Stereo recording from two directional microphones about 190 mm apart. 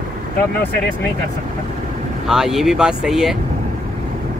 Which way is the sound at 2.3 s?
Centre (ahead or behind).